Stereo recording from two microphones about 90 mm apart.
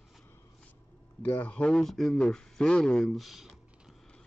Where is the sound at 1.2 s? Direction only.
20° left (ahead or behind).